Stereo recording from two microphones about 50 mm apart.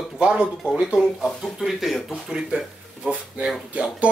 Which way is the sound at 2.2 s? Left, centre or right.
Centre.